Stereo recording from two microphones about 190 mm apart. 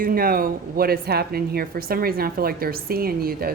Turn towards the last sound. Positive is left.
turn(degrees=-50)  # may be behind; listen again after turning